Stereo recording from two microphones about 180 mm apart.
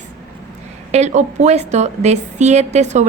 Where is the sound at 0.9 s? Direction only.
40° right (ahead or behind).